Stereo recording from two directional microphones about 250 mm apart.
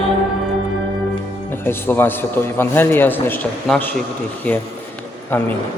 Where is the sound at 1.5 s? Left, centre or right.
Centre.